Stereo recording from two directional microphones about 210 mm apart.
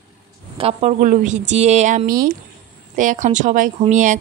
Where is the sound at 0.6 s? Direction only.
30° right (ahead or behind).